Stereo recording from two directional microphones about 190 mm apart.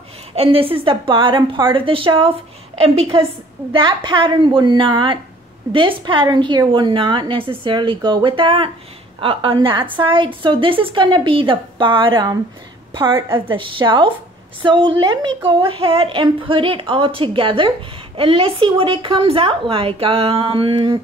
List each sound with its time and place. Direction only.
0.4 s a woman's voice: 30° right (ahead or behind)
13.3 s a woman's voice: 25° right (ahead or behind)